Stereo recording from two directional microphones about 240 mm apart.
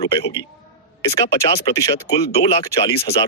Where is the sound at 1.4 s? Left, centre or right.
Centre.